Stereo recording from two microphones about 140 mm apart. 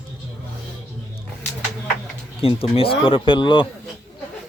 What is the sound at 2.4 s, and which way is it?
Speech, 40° left (ahead or behind).